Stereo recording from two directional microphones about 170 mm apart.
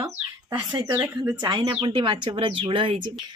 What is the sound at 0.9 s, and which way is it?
Speech, 10° right (ahead or behind).